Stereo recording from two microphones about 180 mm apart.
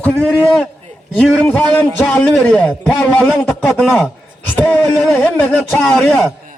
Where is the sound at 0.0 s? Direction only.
5° left (ahead or behind).